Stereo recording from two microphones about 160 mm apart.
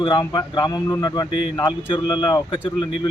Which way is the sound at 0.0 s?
30° left (ahead or behind).